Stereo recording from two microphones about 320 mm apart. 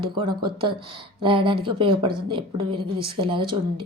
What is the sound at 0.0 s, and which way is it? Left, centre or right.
Speech, centre.